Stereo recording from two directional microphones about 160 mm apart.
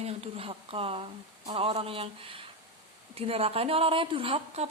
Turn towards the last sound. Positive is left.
turn(degrees=-40)  # may be behind; listen again after turning